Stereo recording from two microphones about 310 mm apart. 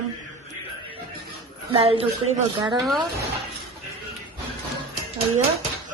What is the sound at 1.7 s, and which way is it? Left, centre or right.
A woman's voice, centre.